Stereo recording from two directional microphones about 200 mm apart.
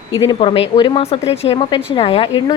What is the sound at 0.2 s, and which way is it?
A woman's voice, 25° left (ahead or behind).